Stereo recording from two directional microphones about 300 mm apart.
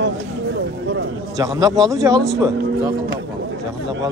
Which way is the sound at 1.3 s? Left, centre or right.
Centre.